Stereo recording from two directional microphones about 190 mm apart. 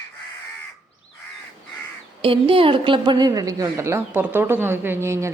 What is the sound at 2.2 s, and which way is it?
A woman's voice, 30° right (ahead or behind).